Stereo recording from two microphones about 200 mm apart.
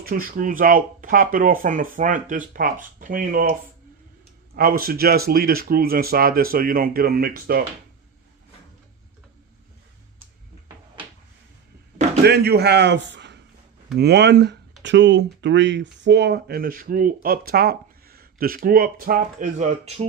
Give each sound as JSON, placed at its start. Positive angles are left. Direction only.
{"t": 0.0, "sound": "speech", "side_deg": -45}
{"t": 4.5, "sound": "speech", "side_deg": -45}
{"t": 12.2, "sound": "a man's voice", "side_deg": -55}